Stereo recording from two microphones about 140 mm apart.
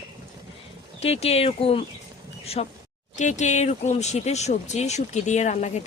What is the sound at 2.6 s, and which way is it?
Speech, 55° left (ahead or behind).